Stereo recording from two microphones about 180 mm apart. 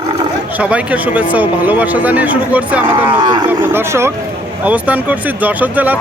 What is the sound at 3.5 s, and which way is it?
Speech, 10° right (ahead or behind).